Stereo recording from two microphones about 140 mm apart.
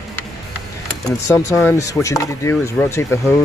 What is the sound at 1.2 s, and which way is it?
Speech, 20° left (ahead or behind).